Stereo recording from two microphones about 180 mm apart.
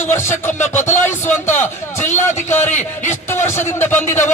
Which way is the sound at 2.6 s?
40° left (ahead or behind).